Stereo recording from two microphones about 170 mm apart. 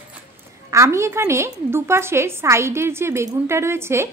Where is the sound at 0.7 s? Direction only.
15° right (ahead or behind).